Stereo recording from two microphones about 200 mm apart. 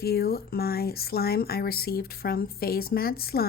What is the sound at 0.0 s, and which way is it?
Speech, 50° left (ahead or behind).